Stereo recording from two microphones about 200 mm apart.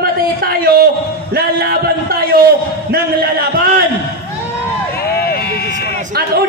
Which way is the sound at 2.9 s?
50° right (ahead or behind).